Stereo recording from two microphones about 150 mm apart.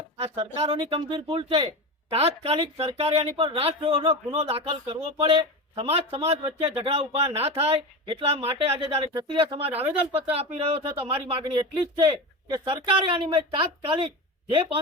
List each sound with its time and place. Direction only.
0.2 s speech: 40° right (ahead or behind)